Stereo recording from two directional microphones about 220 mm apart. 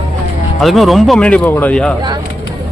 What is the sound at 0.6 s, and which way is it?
Speech, centre (ahead or behind).